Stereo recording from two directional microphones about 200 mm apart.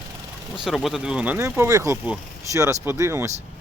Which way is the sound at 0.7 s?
Centre (ahead or behind).